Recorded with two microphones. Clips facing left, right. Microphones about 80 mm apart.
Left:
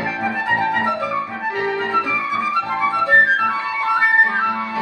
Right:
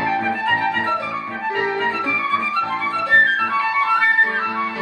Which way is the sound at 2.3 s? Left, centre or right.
Centre.